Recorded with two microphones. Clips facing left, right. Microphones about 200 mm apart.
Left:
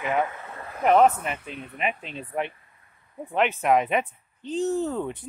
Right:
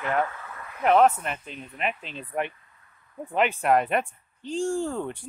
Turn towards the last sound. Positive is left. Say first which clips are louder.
# left 2 dB
turn(degrees=5)  # may be behind; listen again after turning